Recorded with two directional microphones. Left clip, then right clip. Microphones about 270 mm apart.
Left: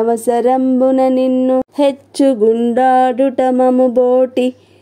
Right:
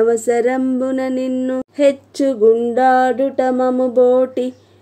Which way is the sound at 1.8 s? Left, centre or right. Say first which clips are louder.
Left 1 dB; centre.